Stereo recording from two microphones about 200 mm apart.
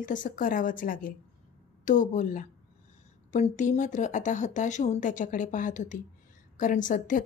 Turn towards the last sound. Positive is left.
turn(degrees=40)  # may be behind; listen again after turning